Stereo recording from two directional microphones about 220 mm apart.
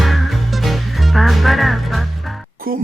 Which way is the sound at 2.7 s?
40° right (ahead or behind).